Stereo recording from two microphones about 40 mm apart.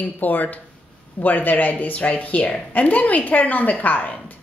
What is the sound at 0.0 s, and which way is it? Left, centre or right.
A woman's voice, left.